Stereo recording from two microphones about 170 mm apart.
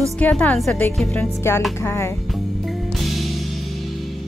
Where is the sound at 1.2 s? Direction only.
15° left (ahead or behind).